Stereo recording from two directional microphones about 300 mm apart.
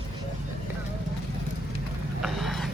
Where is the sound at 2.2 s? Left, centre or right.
Centre.